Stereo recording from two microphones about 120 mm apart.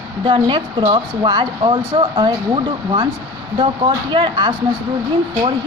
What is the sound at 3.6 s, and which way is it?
Speech, 45° right (ahead or behind).